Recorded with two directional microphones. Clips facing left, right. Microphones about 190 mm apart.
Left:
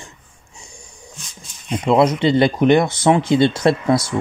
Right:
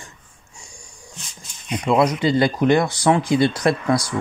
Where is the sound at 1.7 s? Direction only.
25° left (ahead or behind).